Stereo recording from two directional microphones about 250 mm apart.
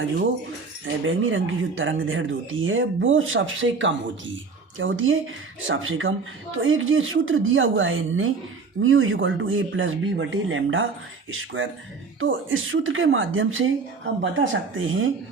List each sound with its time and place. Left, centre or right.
0.9 s speech: right